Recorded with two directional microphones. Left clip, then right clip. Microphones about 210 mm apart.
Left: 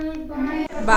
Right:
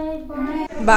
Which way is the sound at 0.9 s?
30° right (ahead or behind).